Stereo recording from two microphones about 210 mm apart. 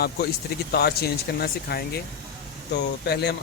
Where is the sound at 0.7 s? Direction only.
50° left (ahead or behind).